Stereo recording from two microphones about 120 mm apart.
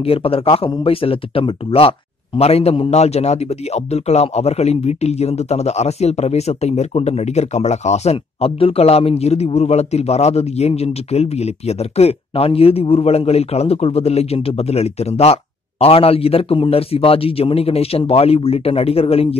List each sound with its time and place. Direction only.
0.0 s a man's voice: 50° left (ahead or behind)